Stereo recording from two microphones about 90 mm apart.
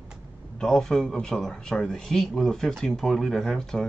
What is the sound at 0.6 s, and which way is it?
Speech, 5° left (ahead or behind).